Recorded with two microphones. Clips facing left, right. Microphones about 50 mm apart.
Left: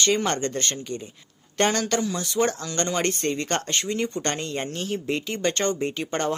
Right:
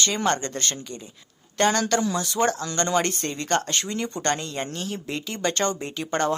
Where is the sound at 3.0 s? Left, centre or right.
Left.